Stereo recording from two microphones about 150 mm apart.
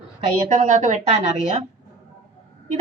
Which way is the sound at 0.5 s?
55° right (ahead or behind).